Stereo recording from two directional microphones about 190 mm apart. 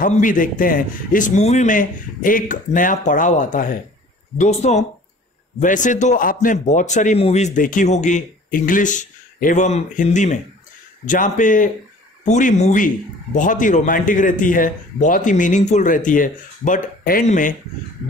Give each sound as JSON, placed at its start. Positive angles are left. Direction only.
{"t": 0.0, "sound": "a man's voice", "side_deg": 45}